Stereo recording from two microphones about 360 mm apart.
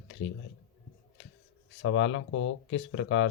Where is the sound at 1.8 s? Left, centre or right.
Left.